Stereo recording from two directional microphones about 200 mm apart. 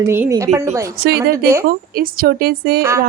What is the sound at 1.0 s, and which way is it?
Speech, 50° right (ahead or behind).